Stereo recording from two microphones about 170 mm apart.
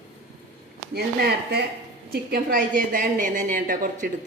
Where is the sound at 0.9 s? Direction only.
70° right (ahead or behind).